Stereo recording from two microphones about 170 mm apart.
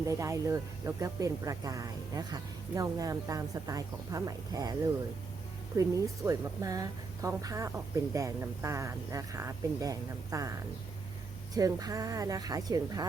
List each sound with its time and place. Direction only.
0.0 s speech: 20° right (ahead or behind)
5.7 s speech: 20° right (ahead or behind)
11.5 s speech: 20° right (ahead or behind)